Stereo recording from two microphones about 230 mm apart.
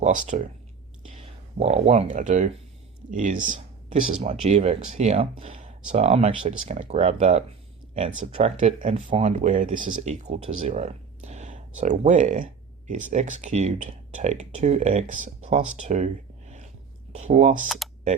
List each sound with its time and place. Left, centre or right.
0.0 s speech: right
9.7 s speech: right
10.7 s a sound: right
13.1 s speech: right
17.1 s speech: right